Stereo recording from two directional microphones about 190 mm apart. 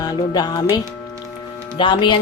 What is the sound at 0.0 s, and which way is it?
A woman's voice, 20° left (ahead or behind).